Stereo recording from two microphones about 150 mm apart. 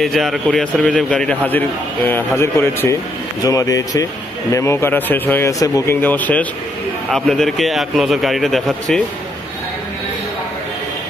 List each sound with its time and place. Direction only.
0.0 s a man's voice: centre (ahead or behind)